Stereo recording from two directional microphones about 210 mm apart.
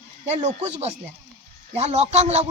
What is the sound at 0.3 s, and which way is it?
A man's voice, 30° right (ahead or behind).